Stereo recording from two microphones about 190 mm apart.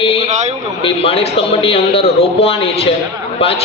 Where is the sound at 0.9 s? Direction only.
30° left (ahead or behind).